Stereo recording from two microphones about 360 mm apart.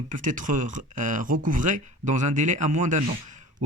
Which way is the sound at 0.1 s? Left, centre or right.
Right.